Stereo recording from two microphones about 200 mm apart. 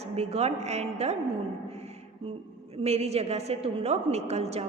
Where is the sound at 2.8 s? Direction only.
30° right (ahead or behind).